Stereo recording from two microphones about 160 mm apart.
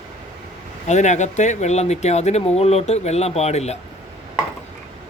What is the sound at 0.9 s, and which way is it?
Speech, 45° left (ahead or behind).